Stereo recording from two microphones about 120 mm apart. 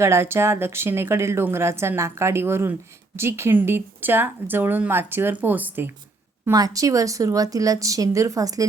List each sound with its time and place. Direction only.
0.0 s a woman's voice: 20° right (ahead or behind)
6.5 s a woman's voice: 30° right (ahead or behind)